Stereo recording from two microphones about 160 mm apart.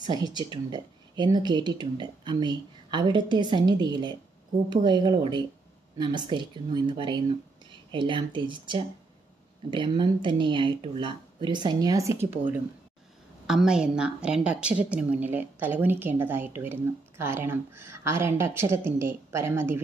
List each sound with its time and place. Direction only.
0.0 s speech: 25° right (ahead or behind)
13.5 s a woman's voice: 5° right (ahead or behind)